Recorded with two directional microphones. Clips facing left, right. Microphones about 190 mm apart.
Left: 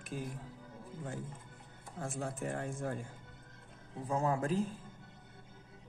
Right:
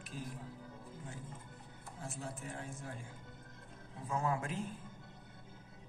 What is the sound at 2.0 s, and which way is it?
Speech, 50° left (ahead or behind).